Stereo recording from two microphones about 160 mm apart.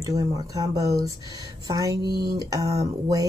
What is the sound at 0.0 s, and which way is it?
Speech, 20° right (ahead or behind).